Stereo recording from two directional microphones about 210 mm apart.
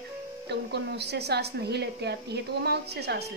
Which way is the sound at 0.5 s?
50° right (ahead or behind).